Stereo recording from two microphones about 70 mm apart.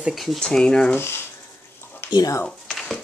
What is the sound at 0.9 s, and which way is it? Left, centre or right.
Speech, left.